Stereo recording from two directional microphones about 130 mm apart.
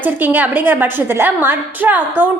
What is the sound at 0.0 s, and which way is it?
A woman's voice, 15° right (ahead or behind).